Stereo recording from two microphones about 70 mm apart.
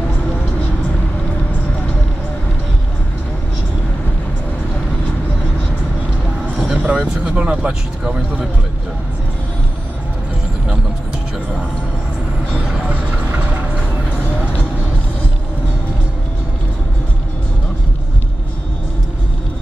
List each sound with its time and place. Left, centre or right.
6.7 s vehicle: right
7.2 s speech: centre
12.5 s vehicle: centre